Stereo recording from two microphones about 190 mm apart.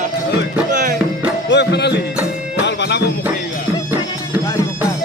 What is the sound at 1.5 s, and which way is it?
Music, 65° left (ahead or behind).